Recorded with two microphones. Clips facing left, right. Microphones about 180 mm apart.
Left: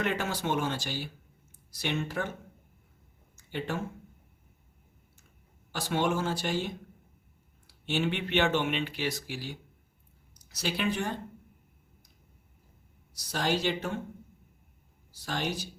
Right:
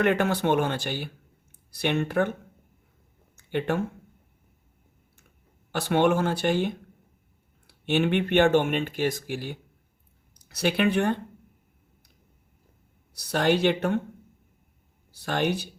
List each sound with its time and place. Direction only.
0.0 s speech: 60° right (ahead or behind)
3.3 s a sound: 60° right (ahead or behind)
5.7 s speech: 60° right (ahead or behind)
13.1 s speech: 60° right (ahead or behind)
15.1 s speech: 60° right (ahead or behind)